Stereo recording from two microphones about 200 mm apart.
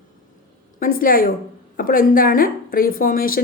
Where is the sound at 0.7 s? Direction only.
45° left (ahead or behind).